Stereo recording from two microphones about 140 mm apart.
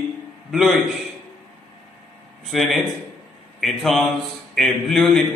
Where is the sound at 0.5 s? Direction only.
Centre (ahead or behind).